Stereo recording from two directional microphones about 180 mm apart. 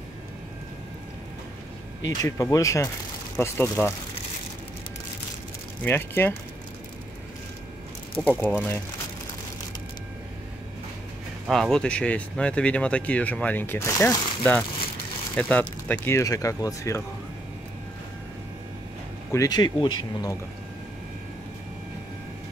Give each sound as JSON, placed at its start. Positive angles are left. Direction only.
{"t": 2.2, "sound": "speech", "side_deg": 15}
{"t": 5.9, "sound": "speech", "side_deg": 10}
{"t": 8.2, "sound": "speech", "side_deg": 10}
{"t": 11.4, "sound": "speech", "side_deg": 0}
{"t": 19.3, "sound": "speech", "side_deg": 20}